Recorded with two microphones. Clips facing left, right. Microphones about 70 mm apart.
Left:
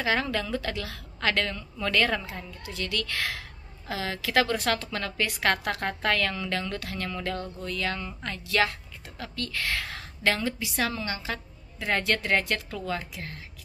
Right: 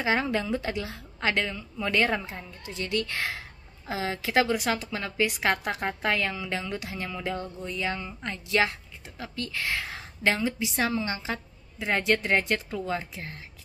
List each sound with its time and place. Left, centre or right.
0.0 s a woman's voice: right
4.5 s a woman's voice: centre